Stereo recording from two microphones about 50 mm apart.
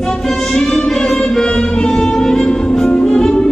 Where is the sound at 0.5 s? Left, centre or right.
Centre.